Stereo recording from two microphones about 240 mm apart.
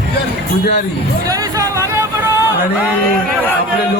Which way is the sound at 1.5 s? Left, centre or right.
Centre.